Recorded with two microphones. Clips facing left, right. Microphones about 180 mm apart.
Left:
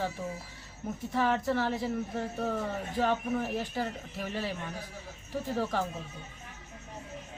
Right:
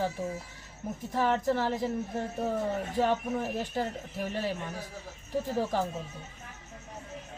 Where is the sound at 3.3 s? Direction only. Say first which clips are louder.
Right 1 dB; 20° right (ahead or behind).